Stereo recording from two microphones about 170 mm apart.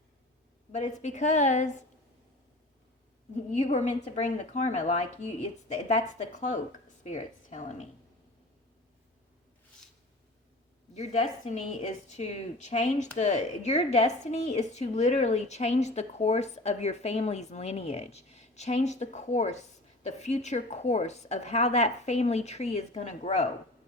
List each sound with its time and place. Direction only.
0.7 s a woman's voice: 45° left (ahead or behind)
3.3 s a woman's voice: 45° left (ahead or behind)
10.9 s a woman's voice: 40° left (ahead or behind)